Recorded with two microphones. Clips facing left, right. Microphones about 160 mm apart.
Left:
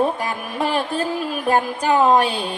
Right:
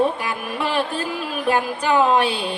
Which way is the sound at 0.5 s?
40° left (ahead or behind).